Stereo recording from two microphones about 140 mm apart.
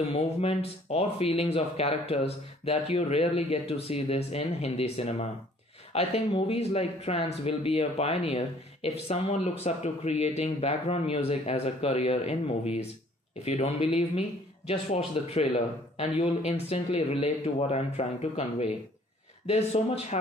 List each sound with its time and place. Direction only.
0.1 s speech: 45° left (ahead or behind)